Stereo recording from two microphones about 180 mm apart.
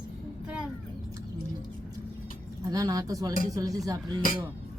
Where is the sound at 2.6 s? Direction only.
20° right (ahead or behind).